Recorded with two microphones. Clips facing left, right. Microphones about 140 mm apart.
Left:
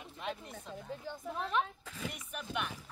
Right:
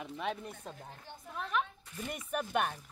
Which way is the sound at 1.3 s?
30° left (ahead or behind).